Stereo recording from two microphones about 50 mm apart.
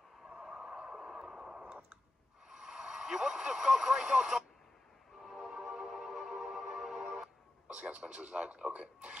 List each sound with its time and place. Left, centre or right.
0.5 s radio: centre
2.5 s speech: centre
5.6 s music: centre
7.6 s speech: right